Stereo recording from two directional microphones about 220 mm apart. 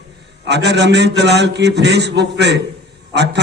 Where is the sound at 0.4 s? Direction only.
50° right (ahead or behind).